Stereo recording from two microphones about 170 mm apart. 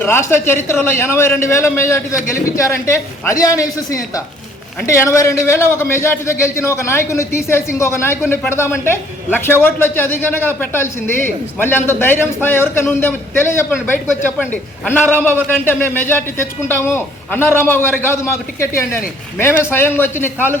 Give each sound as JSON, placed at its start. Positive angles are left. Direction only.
{"t": 0.0, "sound": "a man's voice", "side_deg": 15}
{"t": 19.4, "sound": "a man's voice", "side_deg": 15}